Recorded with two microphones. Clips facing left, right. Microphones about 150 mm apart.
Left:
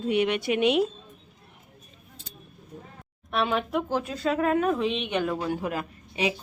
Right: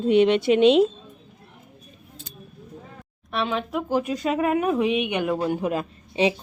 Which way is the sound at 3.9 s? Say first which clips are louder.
Right 6 dB; 15° right (ahead or behind).